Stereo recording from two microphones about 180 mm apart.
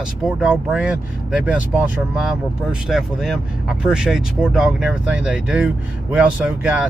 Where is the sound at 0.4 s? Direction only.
5° right (ahead or behind).